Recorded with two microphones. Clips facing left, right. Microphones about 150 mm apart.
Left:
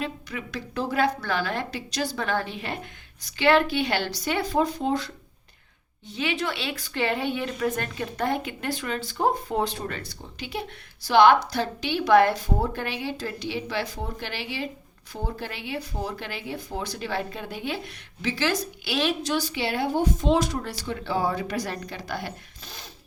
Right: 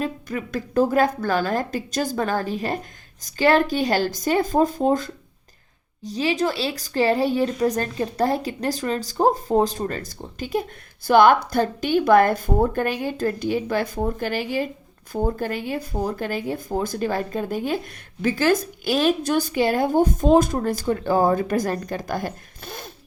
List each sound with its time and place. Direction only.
0.0 s speech: 45° right (ahead or behind)